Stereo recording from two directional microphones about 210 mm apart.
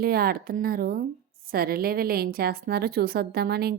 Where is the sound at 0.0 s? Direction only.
45° right (ahead or behind).